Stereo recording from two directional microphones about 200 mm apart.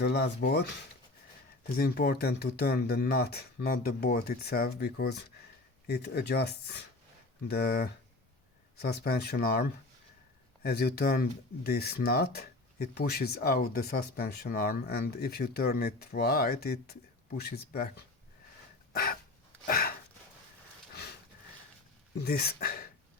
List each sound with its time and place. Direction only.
0.0 s speech: 55° left (ahead or behind)
19.6 s a sound: 45° left (ahead or behind)
22.2 s speech: 50° left (ahead or behind)